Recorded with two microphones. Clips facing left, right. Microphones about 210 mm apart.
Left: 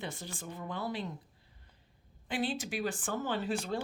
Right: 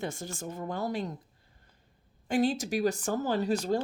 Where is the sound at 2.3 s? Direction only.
45° right (ahead or behind).